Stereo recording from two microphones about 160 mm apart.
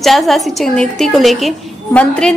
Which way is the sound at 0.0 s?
Centre (ahead or behind).